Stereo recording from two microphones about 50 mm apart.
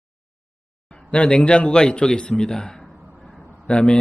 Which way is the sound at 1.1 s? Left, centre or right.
Centre.